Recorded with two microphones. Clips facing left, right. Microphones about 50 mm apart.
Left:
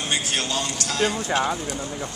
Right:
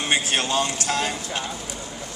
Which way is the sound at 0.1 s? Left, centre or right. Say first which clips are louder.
Right 4 dB; right.